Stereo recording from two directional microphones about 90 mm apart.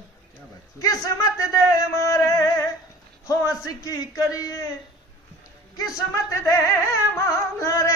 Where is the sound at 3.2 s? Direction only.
40° left (ahead or behind).